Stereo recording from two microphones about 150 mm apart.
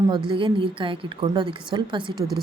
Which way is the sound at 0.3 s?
35° right (ahead or behind).